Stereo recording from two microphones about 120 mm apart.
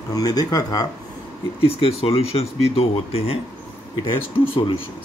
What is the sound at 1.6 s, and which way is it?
Speech, 50° left (ahead or behind).